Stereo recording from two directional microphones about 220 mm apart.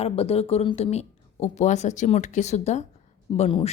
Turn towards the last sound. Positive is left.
turn(degrees=30)  # may be behind; listen again after turning